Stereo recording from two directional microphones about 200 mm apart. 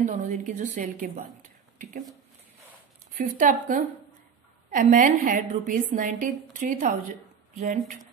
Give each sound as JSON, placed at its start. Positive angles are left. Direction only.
{"t": 0.0, "sound": "a woman's voice", "side_deg": -40}
{"t": 3.2, "sound": "a woman's voice", "side_deg": -40}